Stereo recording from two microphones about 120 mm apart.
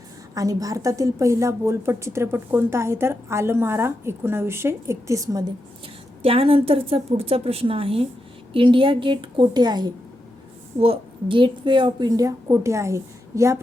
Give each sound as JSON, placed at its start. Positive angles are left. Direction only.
{"t": 0.3, "sound": "a woman's voice", "side_deg": -30}
{"t": 6.2, "sound": "a woman's voice", "side_deg": -50}
{"t": 10.8, "sound": "a woman's voice", "side_deg": -50}